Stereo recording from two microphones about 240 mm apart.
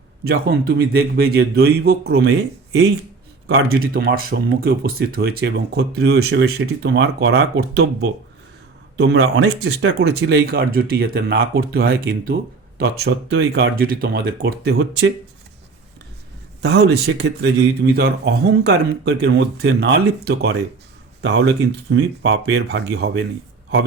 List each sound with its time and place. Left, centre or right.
0.3 s speech: right
3.9 s speech: right
9.0 s speech: right
16.6 s speech: right